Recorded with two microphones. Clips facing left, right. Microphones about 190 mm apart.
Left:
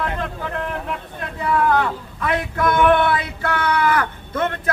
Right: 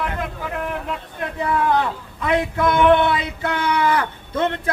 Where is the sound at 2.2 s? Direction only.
20° right (ahead or behind).